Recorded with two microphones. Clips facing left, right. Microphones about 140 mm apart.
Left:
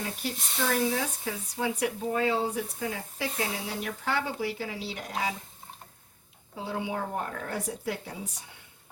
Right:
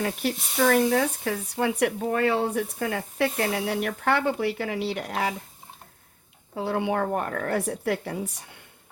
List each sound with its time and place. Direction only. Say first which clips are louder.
0.0 s speech: right 7 dB; 65° right (ahead or behind)
6.5 s speech: right 7 dB; 65° right (ahead or behind)